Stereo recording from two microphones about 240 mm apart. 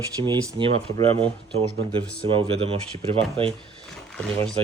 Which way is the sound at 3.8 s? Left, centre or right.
Centre.